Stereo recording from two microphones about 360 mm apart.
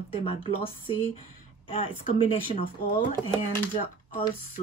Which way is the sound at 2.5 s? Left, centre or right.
Centre.